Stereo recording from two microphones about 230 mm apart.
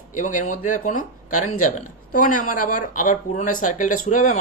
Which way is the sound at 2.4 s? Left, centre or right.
Left.